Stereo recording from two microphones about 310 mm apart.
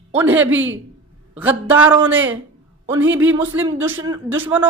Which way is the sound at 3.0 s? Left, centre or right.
Right.